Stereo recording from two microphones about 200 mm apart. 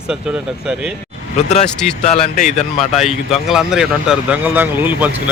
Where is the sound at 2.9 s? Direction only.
Centre (ahead or behind).